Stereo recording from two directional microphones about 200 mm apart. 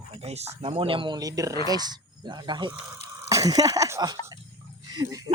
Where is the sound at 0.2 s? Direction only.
30° right (ahead or behind).